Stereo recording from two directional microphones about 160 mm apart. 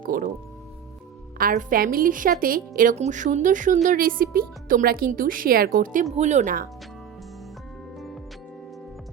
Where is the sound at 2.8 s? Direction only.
50° right (ahead or behind); by 6.0 s 65° right (ahead or behind).